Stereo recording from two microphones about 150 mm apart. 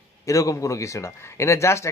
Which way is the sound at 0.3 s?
20° left (ahead or behind).